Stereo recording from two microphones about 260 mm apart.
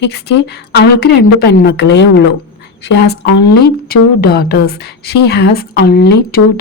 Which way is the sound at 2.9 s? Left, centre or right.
Left.